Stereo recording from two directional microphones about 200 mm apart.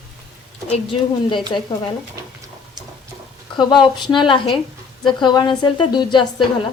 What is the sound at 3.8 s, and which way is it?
A woman's voice, 20° left (ahead or behind).